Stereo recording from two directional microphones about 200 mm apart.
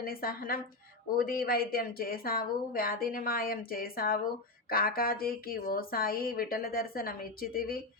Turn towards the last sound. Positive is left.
turn(degrees=45)  # may be behind; listen again after turning